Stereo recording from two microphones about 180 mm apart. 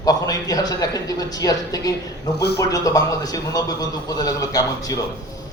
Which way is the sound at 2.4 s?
65° left (ahead or behind).